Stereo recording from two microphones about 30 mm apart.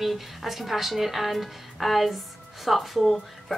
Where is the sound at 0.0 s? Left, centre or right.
Centre.